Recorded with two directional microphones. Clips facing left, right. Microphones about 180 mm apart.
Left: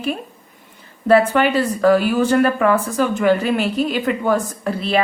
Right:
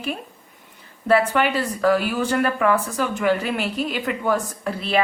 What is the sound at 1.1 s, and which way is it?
Speech, 40° left (ahead or behind).